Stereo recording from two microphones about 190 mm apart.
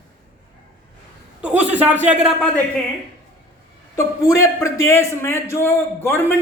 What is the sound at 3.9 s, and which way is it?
A man's voice, 15° left (ahead or behind).